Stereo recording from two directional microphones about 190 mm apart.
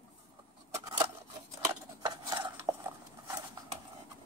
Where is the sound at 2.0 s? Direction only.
20° right (ahead or behind).